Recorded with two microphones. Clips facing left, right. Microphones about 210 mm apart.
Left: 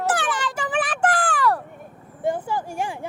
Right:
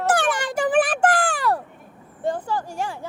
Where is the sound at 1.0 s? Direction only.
25° right (ahead or behind).